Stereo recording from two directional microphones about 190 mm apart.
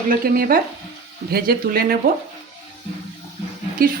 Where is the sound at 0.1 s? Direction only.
50° right (ahead or behind).